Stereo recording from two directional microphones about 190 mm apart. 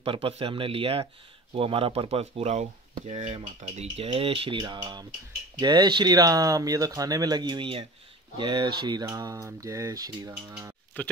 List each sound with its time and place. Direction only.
0.0 s speech: 30° right (ahead or behind)
10.9 s speech: 10° left (ahead or behind)